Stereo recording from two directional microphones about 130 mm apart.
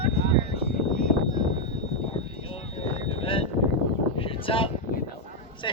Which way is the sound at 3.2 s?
45° left (ahead or behind).